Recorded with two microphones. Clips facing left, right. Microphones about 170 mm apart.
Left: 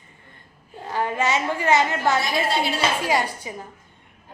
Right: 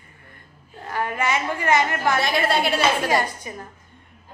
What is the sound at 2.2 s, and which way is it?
Speech, 65° right (ahead or behind).